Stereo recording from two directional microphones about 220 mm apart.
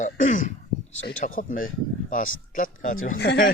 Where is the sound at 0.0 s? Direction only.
35° left (ahead or behind).